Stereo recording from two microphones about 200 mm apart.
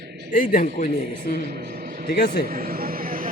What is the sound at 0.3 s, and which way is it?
Speech, 40° left (ahead or behind).